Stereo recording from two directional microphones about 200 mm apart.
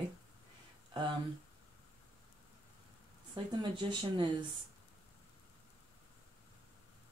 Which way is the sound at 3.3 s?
25° right (ahead or behind).